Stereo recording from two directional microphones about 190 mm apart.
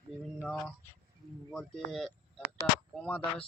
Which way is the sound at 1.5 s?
Centre (ahead or behind).